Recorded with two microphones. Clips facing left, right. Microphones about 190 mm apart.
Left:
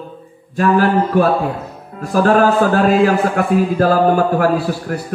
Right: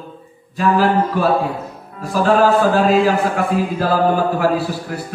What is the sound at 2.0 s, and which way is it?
Speech, 55° left (ahead or behind).